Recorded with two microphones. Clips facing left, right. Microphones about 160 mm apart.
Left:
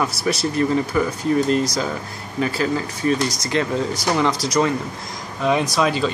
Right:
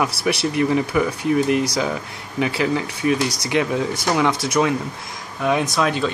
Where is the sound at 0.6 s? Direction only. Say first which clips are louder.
Even; 15° right (ahead or behind).